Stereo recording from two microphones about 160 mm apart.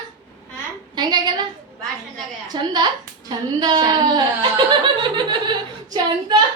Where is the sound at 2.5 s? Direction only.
25° right (ahead or behind).